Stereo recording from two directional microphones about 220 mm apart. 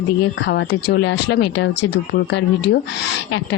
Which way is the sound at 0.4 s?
55° left (ahead or behind).